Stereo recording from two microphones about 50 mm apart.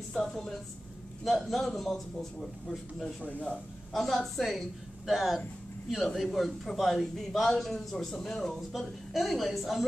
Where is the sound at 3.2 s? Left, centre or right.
Left.